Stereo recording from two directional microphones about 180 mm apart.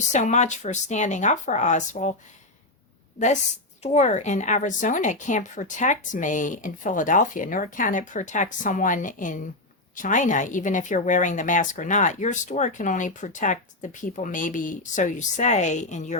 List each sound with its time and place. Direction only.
0.1 s speech: 40° left (ahead or behind)
3.8 s a woman's voice: 40° left (ahead or behind)